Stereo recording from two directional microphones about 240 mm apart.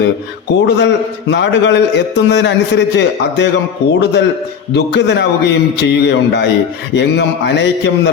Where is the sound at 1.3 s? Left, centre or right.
Left.